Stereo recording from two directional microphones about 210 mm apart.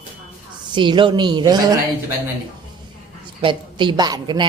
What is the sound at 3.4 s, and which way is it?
A woman's voice, 20° right (ahead or behind).